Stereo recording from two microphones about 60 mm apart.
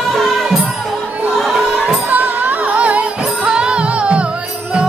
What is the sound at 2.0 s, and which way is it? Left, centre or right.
Music, right.